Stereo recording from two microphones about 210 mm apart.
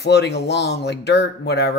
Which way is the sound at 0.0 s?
55° left (ahead or behind).